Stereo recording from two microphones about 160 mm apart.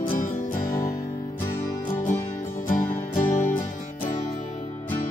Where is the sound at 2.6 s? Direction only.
55° left (ahead or behind).